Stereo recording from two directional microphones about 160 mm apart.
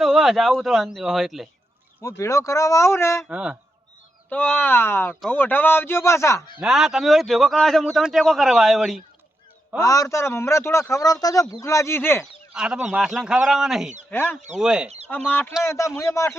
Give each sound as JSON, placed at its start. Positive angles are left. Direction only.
{"t": 0.0, "sound": "a man's voice", "side_deg": 0}
{"t": 2.0, "sound": "a man's voice", "side_deg": 20}
{"t": 3.2, "sound": "speech", "side_deg": -10}
{"t": 4.3, "sound": "a man's voice", "side_deg": 10}
{"t": 6.6, "sound": "a man's voice", "side_deg": -5}
{"t": 9.7, "sound": "a man's voice", "side_deg": 20}
{"t": 12.5, "sound": "a man's voice", "side_deg": -5}
{"t": 14.1, "sound": "a man's voice", "side_deg": 10}
{"t": 14.6, "sound": "a man's voice", "side_deg": -5}
{"t": 14.8, "sound": "chicken", "side_deg": -40}
{"t": 15.1, "sound": "a man's voice", "side_deg": 10}